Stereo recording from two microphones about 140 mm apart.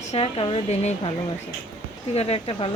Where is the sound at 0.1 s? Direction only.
45° left (ahead or behind).